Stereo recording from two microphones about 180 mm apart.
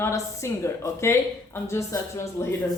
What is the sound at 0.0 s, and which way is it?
Speech, 15° left (ahead or behind).